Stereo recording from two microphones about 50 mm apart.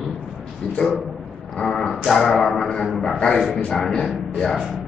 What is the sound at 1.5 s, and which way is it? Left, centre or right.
Speech, centre.